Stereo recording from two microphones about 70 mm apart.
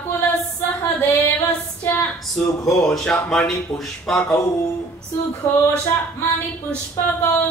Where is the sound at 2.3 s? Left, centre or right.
Centre.